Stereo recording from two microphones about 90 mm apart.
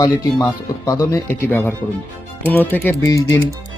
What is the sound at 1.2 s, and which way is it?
Speech, 25° left (ahead or behind).